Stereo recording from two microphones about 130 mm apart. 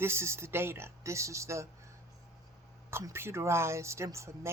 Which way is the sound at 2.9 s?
20° right (ahead or behind).